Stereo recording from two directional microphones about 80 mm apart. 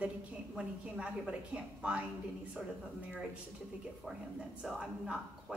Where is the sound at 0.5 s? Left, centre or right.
Centre.